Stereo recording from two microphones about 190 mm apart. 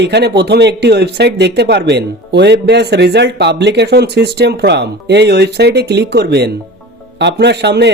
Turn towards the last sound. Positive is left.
turn(degrees=-60)  # may be behind; listen again after turning